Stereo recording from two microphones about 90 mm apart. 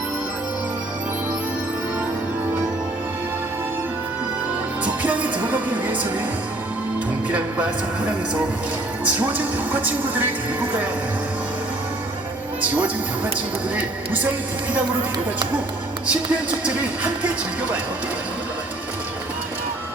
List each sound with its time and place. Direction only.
5.0 s music: 15° right (ahead or behind)
7.3 s speech: 15° right (ahead or behind)
12.6 s speech: 15° right (ahead or behind)
16.0 s speech: 15° right (ahead or behind)